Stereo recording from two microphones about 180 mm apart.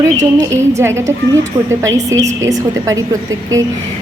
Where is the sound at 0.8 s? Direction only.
15° right (ahead or behind).